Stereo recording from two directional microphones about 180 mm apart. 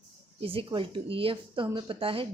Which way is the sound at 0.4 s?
30° right (ahead or behind).